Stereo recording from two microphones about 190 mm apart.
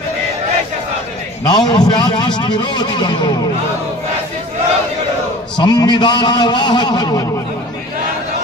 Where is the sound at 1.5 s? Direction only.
20° left (ahead or behind).